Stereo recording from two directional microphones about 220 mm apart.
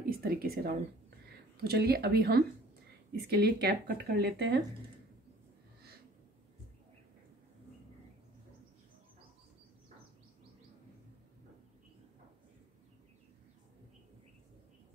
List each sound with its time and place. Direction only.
0.0 s speech: 40° right (ahead or behind)